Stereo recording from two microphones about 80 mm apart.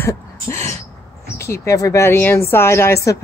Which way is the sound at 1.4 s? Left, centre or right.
Left.